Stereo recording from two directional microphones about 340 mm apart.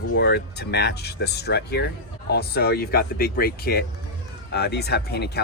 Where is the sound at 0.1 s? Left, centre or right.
Left.